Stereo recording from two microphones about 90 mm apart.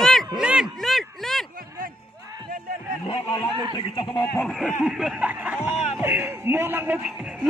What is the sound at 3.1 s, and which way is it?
Speech, 75° left (ahead or behind).